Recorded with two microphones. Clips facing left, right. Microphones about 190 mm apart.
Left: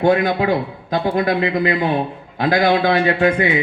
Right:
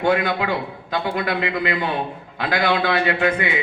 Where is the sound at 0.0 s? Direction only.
40° left (ahead or behind).